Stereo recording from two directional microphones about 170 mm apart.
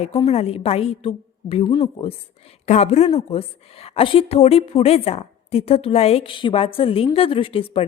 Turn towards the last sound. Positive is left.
turn(degrees=30)  # may be behind; listen again after turning